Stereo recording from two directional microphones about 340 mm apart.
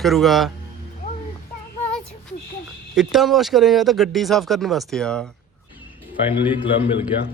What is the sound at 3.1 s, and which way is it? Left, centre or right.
Speech, centre.